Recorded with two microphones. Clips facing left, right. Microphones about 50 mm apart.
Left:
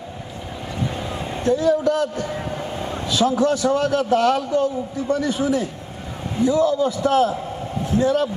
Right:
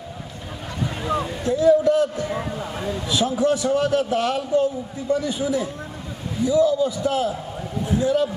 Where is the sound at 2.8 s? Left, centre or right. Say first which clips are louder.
Left 3 dB; left.